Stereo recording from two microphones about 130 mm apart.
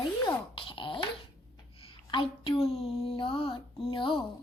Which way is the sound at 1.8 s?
45° left (ahead or behind).